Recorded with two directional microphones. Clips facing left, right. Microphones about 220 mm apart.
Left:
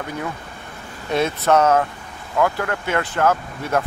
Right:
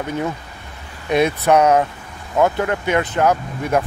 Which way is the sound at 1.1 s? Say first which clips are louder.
Right 3 dB; 15° right (ahead or behind).